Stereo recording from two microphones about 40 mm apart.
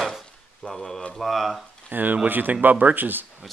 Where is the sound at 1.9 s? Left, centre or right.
Right.